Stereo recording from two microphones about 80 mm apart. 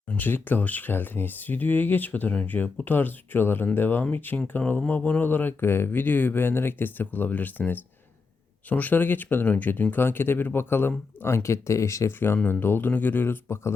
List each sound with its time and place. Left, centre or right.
0.1 s speech: left
12.4 s speech: left